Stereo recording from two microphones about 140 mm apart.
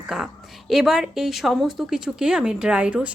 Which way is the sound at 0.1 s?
Centre (ahead or behind).